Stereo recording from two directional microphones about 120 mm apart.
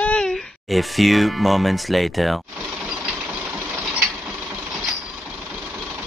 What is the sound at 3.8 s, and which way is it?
Mechanisms, 5° right (ahead or behind).